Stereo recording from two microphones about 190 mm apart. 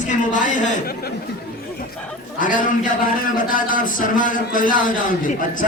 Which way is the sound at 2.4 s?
45° left (ahead or behind).